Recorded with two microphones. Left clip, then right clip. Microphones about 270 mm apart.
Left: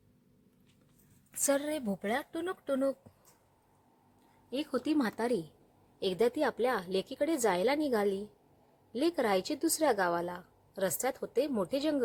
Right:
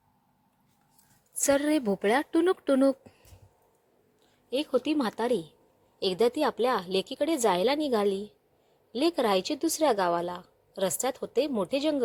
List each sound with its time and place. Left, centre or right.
1.5 s a woman's voice: centre
4.4 s a woman's voice: centre